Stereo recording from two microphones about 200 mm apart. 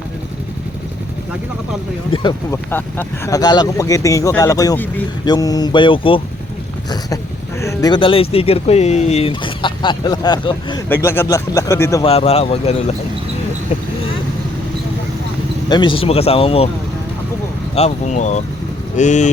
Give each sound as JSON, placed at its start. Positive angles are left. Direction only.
{"t": 2.1, "sound": "speech", "side_deg": 25}
{"t": 2.6, "sound": "speech", "side_deg": 10}
{"t": 7.6, "sound": "speech", "side_deg": 15}
{"t": 10.8, "sound": "speech", "side_deg": 10}
{"t": 12.0, "sound": "speech", "side_deg": 30}
{"t": 15.7, "sound": "speech", "side_deg": 25}
{"t": 17.7, "sound": "speech", "side_deg": 35}